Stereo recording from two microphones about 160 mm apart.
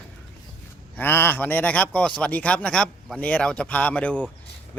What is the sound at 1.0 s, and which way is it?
Speech, 15° left (ahead or behind).